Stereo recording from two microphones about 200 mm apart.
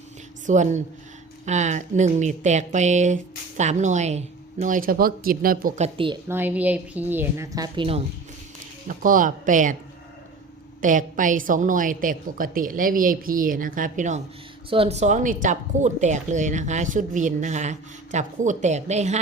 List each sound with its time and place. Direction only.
0.4 s speech: 35° right (ahead or behind)
6.2 s a woman's voice: 10° right (ahead or behind); by 8.0 s 25° right (ahead or behind)
8.9 s speech: 40° right (ahead or behind)
10.8 s speech: 40° right (ahead or behind)